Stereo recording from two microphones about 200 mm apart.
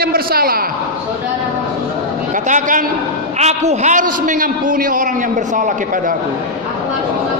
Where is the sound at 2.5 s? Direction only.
40° right (ahead or behind).